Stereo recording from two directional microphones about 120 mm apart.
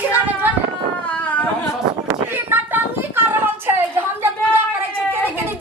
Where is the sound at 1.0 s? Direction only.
10° left (ahead or behind).